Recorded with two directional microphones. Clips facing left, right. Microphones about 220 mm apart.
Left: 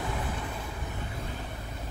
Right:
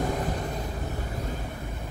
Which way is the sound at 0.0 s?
40° right (ahead or behind).